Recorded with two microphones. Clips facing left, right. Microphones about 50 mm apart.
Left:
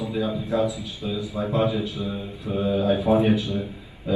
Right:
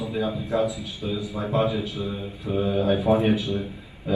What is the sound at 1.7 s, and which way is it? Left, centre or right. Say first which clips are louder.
A man's voice: left 1 dB; right.